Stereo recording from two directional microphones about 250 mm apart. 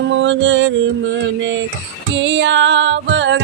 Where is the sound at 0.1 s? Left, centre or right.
Right.